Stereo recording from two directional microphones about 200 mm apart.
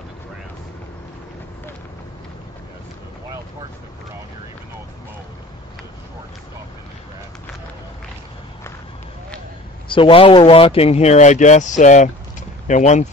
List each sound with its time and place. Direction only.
9.8 s speech: 25° left (ahead or behind)